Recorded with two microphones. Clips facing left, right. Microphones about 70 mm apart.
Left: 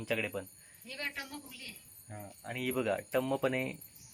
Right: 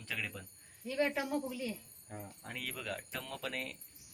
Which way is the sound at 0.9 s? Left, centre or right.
Centre.